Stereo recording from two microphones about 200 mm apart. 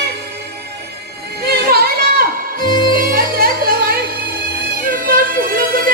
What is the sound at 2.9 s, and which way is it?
Music, 45° right (ahead or behind).